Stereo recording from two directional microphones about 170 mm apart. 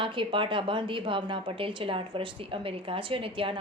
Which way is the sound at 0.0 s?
30° right (ahead or behind).